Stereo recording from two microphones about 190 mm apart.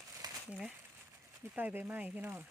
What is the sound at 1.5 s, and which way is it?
Speech, 10° right (ahead or behind).